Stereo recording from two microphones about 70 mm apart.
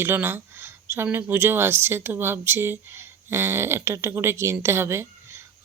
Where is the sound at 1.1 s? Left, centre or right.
Right.